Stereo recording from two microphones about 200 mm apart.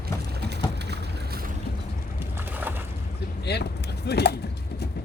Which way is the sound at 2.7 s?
10° right (ahead or behind).